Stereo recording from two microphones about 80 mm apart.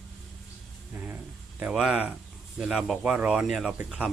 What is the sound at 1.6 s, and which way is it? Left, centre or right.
Speech, centre.